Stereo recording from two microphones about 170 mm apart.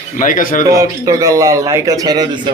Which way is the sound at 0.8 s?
20° right (ahead or behind).